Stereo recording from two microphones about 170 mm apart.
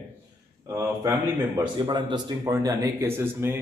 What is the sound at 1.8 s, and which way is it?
Speech, 25° right (ahead or behind).